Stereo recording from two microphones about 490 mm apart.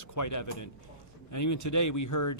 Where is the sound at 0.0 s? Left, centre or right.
Left.